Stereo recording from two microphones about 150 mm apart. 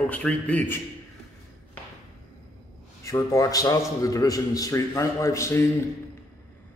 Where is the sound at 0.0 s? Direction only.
10° left (ahead or behind).